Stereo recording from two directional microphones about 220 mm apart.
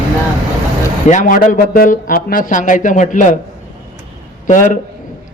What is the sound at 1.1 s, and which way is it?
A man's voice, 35° left (ahead or behind).